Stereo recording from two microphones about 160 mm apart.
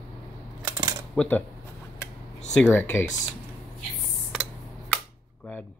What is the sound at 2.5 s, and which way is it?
Speech, 10° left (ahead or behind).